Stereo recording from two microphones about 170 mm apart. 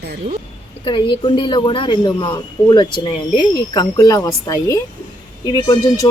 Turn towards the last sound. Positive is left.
turn(degrees=20)  # may be behind; listen again after turning